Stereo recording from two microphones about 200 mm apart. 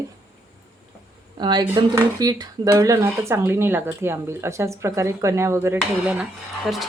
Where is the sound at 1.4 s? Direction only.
20° right (ahead or behind).